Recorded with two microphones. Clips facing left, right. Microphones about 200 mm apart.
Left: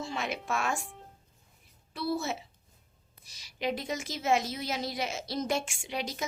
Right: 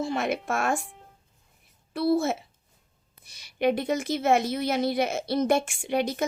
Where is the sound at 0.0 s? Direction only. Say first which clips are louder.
Right 8 dB; 55° right (ahead or behind).